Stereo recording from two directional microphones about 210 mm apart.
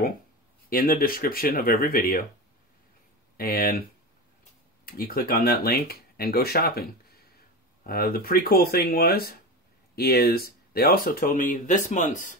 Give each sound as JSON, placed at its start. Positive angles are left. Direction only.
{"t": 0.7, "sound": "speech", "side_deg": 45}
{"t": 3.3, "sound": "speech", "side_deg": 45}
{"t": 4.8, "sound": "speech", "side_deg": 45}